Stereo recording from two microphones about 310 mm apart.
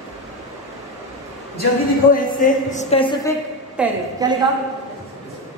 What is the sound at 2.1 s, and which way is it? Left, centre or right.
Speech, left.